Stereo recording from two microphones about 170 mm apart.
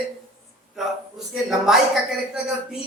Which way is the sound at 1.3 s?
5° right (ahead or behind).